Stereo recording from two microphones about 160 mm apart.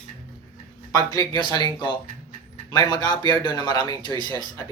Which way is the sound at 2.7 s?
25° left (ahead or behind).